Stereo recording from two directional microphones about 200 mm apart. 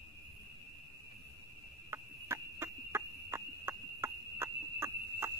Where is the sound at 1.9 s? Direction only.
15° right (ahead or behind).